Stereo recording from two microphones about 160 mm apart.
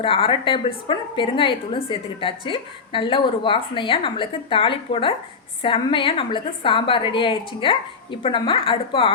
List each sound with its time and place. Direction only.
0.0 s speech: 35° left (ahead or behind)